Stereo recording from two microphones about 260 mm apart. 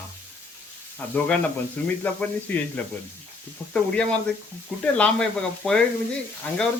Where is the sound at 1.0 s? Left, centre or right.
Centre.